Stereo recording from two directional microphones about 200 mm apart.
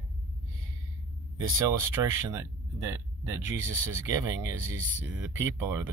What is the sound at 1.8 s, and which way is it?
Speech, 15° right (ahead or behind).